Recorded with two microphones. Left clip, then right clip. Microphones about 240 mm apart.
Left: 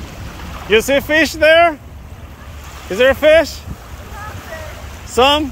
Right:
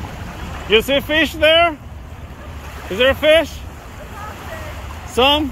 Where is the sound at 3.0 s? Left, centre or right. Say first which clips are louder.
Left 3 dB; left.